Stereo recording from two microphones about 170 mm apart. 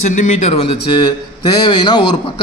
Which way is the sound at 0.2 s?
45° left (ahead or behind).